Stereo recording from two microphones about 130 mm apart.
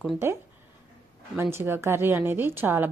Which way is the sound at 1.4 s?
20° right (ahead or behind).